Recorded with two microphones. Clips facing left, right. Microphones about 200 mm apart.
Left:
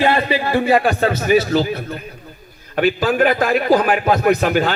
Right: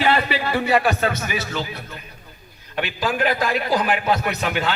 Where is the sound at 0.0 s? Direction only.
25° left (ahead or behind).